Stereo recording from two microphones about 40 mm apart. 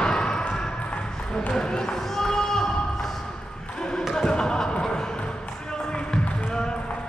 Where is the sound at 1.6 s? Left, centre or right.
Centre.